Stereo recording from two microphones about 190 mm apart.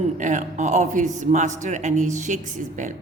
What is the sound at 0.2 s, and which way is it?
A man's voice, 40° right (ahead or behind).